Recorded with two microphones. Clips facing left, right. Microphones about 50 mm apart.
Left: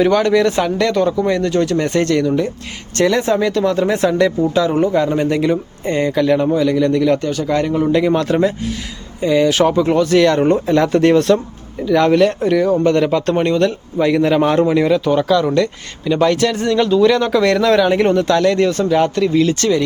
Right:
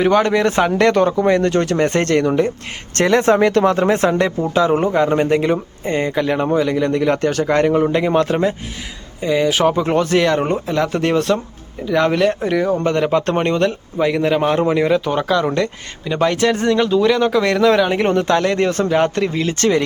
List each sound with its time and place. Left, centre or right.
0.0 s speech: right
7.2 s speech: right
7.4 s speech: right
9.2 s speech: centre
9.8 s speech: right
10.2 s speech: centre
14.0 s speech: centre
16.7 s speech: centre; by 19.8 s right